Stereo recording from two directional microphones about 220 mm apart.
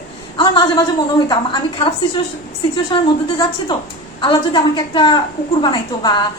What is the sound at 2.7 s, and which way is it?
A woman's voice, 20° left (ahead or behind).